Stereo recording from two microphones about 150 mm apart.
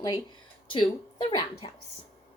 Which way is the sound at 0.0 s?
30° left (ahead or behind).